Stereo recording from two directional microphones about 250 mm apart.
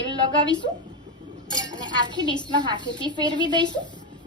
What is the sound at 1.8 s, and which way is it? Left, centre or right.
A child's voice, centre.